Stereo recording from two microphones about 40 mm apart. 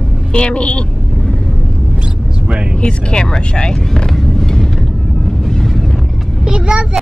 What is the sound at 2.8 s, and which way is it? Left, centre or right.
Speech, left.